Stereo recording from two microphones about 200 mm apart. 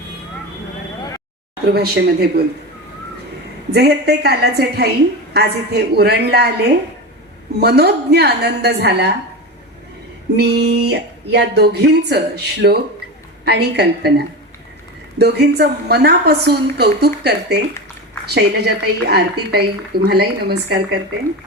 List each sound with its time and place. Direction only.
1.6 s a woman's voice: 55° right (ahead or behind)
3.7 s a woman's voice: 55° right (ahead or behind)
7.6 s speech: 55° right (ahead or behind)
10.3 s a woman's voice: 55° right (ahead or behind)